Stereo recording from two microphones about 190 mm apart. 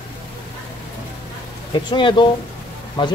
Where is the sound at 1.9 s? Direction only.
25° left (ahead or behind).